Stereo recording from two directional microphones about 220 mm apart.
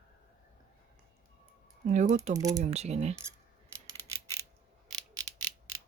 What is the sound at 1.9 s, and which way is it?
Speech, 35° right (ahead or behind).